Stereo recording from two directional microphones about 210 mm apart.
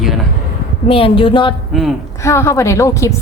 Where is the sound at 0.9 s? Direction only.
25° left (ahead or behind).